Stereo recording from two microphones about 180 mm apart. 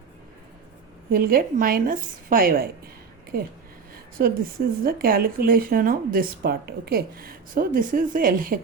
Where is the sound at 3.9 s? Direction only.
55° right (ahead or behind).